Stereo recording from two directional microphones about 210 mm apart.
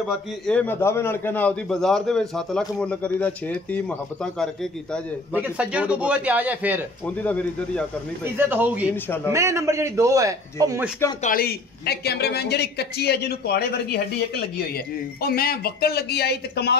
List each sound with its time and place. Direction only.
0.5 s a man's voice: 10° left (ahead or behind)
5.3 s a man's voice: 5° right (ahead or behind)
8.4 s a man's voice: 10° right (ahead or behind)
11.2 s a woman's voice: 45° left (ahead or behind)